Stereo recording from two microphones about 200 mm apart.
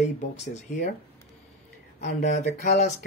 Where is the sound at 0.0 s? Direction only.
35° left (ahead or behind).